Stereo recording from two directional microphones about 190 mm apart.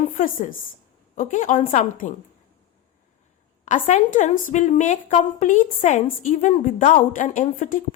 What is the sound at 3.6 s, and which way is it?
A woman's voice, 45° left (ahead or behind).